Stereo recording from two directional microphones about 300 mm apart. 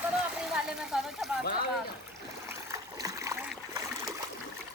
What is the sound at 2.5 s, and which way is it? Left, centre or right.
Stream, centre.